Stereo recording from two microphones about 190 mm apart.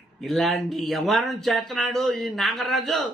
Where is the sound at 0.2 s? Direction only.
Centre (ahead or behind).